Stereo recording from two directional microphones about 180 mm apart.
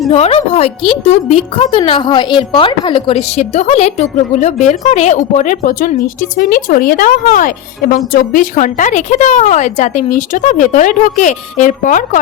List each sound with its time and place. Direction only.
0.1 s a woman's voice: 35° left (ahead or behind)